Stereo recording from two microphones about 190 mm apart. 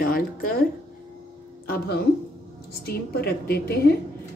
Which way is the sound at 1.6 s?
55° left (ahead or behind).